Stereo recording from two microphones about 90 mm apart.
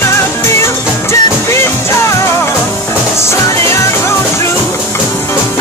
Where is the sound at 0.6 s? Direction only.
30° left (ahead or behind).